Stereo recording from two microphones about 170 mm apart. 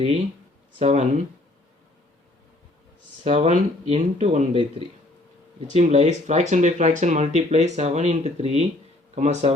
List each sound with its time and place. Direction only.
0.8 s speech: 40° right (ahead or behind)
3.2 s speech: 40° right (ahead or behind)
5.7 s speech: 40° right (ahead or behind)